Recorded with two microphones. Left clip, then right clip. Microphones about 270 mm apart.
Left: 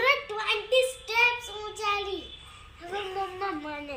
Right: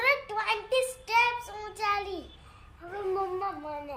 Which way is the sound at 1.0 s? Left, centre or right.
Centre.